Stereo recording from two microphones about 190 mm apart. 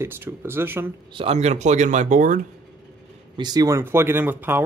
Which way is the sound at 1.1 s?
30° right (ahead or behind).